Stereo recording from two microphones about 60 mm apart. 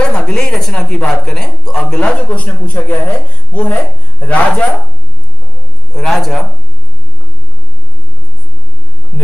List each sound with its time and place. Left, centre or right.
0.0 s speech: centre
2.0 s speech: left
5.9 s a man's voice: centre